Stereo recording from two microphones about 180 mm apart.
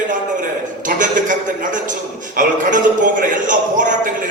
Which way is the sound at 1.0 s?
45° right (ahead or behind).